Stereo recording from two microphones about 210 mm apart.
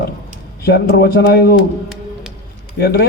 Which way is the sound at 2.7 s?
50° left (ahead or behind).